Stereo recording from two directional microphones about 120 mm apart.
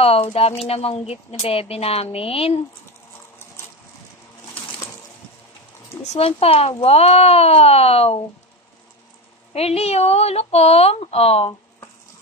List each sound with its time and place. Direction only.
0.0 s speech: 55° left (ahead or behind)
6.1 s speech: 55° left (ahead or behind)
9.5 s speech: 60° left (ahead or behind)